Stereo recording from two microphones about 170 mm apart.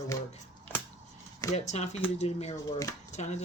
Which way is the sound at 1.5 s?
40° left (ahead or behind).